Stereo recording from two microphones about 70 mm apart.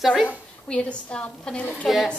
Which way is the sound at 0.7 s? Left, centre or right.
Centre.